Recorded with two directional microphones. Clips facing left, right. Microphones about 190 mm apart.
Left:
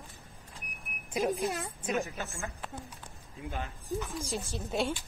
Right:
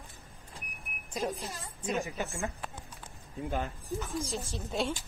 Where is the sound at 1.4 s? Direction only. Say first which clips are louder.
Left 9 dB; 60° left (ahead or behind).